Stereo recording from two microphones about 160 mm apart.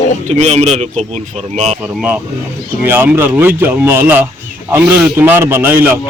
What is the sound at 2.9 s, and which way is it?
Speech, 15° right (ahead or behind).